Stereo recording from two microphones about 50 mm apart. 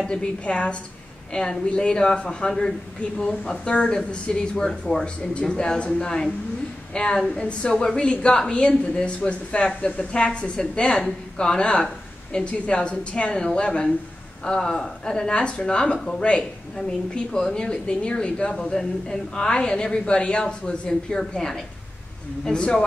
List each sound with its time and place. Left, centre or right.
0.0 s a woman's voice: centre